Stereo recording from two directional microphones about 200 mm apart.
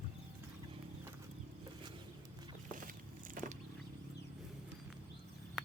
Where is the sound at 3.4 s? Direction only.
45° right (ahead or behind).